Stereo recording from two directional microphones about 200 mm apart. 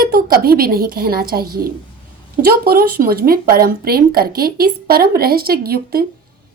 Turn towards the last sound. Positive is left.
turn(degrees=-50)  # may be behind; listen again after turning